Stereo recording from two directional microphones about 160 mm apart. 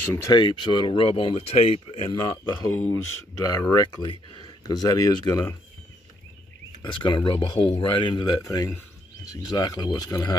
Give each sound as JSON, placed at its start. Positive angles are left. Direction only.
{"t": 0.1, "sound": "speech", "side_deg": 20}
{"t": 2.2, "sound": "speech", "side_deg": 25}
{"t": 6.8, "sound": "speech", "side_deg": 30}